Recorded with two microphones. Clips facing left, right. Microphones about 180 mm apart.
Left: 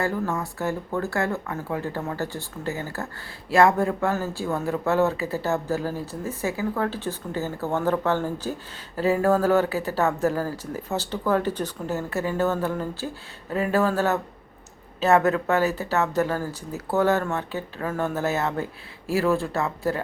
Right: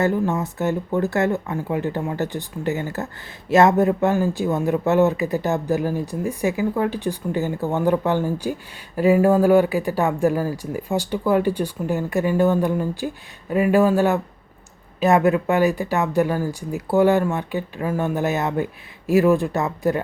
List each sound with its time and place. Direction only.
0.0 s speech: 20° right (ahead or behind)